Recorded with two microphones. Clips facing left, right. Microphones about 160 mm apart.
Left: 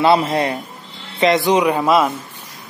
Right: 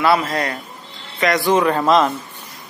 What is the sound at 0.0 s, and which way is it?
A man's voice, 25° left (ahead or behind).